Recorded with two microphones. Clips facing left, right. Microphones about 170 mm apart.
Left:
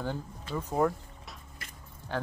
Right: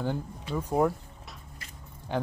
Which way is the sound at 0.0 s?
10° right (ahead or behind).